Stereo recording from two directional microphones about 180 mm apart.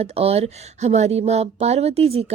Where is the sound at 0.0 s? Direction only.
35° right (ahead or behind).